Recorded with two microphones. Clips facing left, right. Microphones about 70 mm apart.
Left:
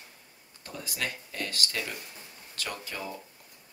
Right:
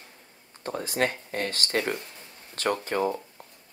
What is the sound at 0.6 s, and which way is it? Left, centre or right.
Speech, right.